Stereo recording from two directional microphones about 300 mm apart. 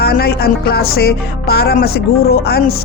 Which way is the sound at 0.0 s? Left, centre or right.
Left.